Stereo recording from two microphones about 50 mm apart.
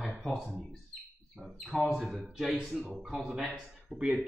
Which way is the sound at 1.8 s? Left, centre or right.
Centre.